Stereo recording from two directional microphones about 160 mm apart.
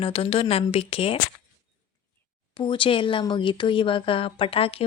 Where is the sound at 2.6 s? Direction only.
30° left (ahead or behind).